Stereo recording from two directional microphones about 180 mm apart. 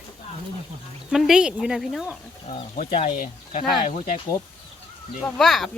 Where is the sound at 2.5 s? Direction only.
40° left (ahead or behind).